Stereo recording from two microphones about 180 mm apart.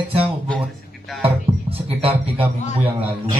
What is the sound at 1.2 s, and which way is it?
Music, 30° right (ahead or behind).